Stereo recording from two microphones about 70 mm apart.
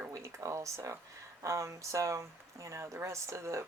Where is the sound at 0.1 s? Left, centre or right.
Right.